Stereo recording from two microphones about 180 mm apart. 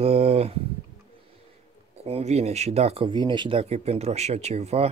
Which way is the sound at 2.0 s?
35° right (ahead or behind).